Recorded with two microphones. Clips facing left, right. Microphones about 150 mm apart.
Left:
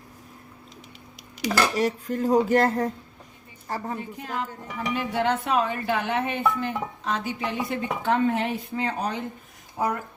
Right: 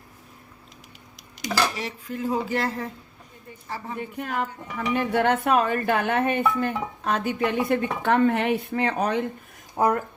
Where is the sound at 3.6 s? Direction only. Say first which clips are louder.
Left 4 dB; 40° left (ahead or behind).